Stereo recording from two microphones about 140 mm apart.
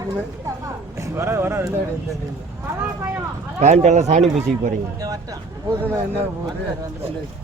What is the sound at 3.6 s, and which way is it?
Speech, 55° right (ahead or behind).